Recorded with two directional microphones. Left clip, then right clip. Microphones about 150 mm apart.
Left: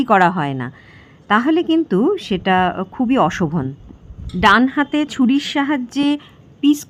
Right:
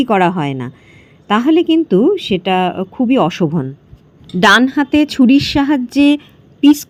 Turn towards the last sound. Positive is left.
turn(degrees=-20)  # may be behind; listen again after turning